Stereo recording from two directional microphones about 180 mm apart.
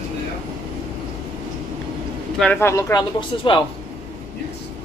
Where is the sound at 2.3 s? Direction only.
5° left (ahead or behind); by 3.6 s 25° left (ahead or behind).